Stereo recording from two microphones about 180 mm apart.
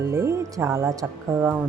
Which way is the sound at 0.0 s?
15° right (ahead or behind).